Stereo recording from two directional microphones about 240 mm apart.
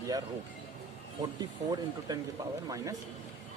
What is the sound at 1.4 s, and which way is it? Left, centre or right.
Speech, centre.